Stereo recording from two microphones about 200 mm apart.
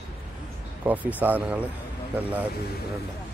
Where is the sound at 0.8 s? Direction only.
10° right (ahead or behind).